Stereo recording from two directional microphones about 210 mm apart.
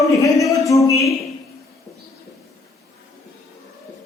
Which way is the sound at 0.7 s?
15° left (ahead or behind).